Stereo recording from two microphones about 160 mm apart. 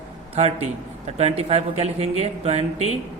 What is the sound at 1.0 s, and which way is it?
Speech, 40° right (ahead or behind).